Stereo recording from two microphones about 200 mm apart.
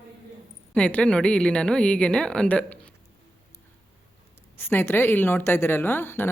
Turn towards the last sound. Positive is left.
turn(degrees=10)  # may be behind; listen again after turning